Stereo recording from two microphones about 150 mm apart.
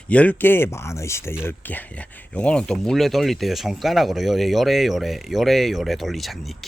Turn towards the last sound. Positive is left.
turn(degrees=0)  # may be behind; listen again after turning